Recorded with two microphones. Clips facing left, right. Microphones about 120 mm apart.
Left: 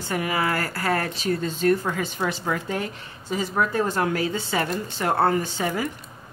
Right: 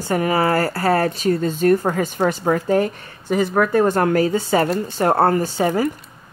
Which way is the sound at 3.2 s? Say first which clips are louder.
Right 7 dB; 60° right (ahead or behind).